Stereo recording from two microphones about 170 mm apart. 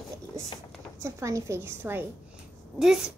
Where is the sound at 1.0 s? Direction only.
15° right (ahead or behind).